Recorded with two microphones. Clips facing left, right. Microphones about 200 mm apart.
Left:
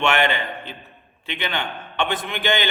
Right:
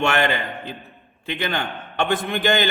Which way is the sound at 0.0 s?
40° right (ahead or behind).